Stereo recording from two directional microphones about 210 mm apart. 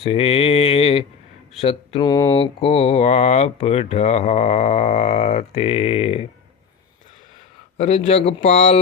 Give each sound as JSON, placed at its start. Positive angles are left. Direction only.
{"t": 0.0, "sound": "mantra", "side_deg": 30}
{"t": 1.6, "sound": "speech", "side_deg": 20}
{"t": 7.8, "sound": "mantra", "side_deg": 30}